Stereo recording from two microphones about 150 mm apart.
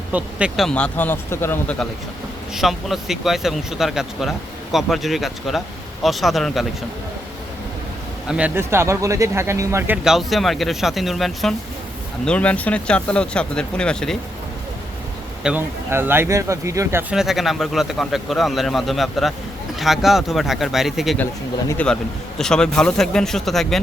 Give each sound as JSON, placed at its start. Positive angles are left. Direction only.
{"t": 0.1, "sound": "speech", "side_deg": -10}
{"t": 2.6, "sound": "speech", "side_deg": 0}
{"t": 8.3, "sound": "speech", "side_deg": -10}
{"t": 15.4, "sound": "speech", "side_deg": -15}
{"t": 21.7, "sound": "speech", "side_deg": 10}